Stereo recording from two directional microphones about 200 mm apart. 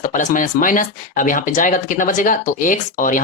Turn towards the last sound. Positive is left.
turn(degrees=40)  # may be behind; listen again after turning